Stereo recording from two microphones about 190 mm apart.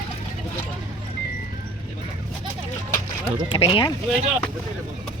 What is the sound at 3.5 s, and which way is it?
Speech, 30° left (ahead or behind).